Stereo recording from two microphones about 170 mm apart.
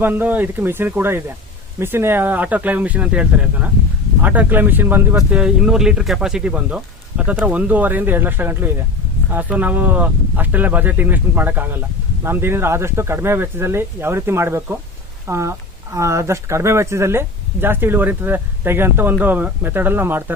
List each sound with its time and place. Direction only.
0.0 s speech: 10° right (ahead or behind)